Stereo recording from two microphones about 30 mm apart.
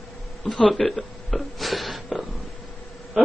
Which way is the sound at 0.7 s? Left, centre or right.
Centre.